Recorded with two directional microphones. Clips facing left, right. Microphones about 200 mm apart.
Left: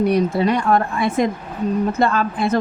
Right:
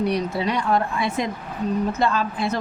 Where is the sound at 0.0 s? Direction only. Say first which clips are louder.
Left 6 dB; 50° left (ahead or behind).